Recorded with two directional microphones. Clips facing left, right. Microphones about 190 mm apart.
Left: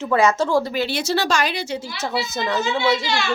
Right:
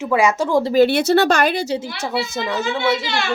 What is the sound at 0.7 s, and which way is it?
Speech, 55° right (ahead or behind).